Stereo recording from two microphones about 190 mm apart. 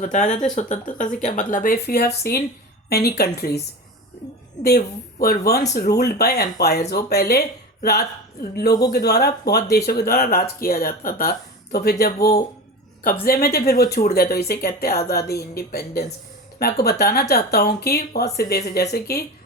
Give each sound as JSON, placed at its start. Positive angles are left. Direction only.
{"t": 0.0, "sound": "speech", "side_deg": 40}
{"t": 5.2, "sound": "speech", "side_deg": 55}